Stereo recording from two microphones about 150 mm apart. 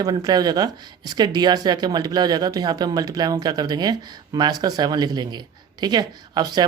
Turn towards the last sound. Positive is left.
turn(degrees=-25)  # may be behind; listen again after turning